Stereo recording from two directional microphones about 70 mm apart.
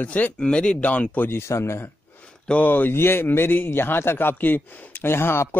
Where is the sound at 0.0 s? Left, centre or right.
Left.